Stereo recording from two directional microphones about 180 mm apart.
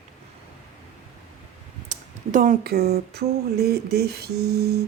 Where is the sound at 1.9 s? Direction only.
45° right (ahead or behind).